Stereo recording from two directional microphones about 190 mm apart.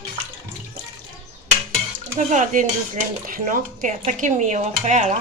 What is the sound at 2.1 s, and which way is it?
Dishes, 40° right (ahead or behind).